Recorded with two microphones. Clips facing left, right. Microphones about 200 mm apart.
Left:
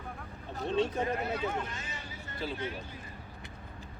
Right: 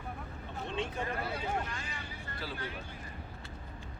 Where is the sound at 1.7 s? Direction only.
20° left (ahead or behind).